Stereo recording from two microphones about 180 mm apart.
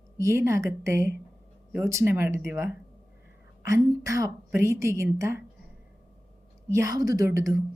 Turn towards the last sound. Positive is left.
turn(degrees=-15)  # may be behind; listen again after turning